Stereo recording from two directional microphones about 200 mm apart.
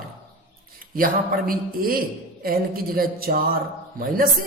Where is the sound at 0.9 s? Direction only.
45° right (ahead or behind).